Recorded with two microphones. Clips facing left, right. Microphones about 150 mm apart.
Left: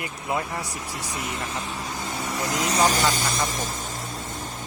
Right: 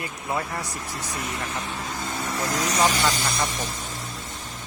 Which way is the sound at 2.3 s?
15° left (ahead or behind).